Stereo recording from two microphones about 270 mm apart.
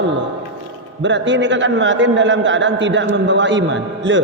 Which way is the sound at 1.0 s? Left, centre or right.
Right.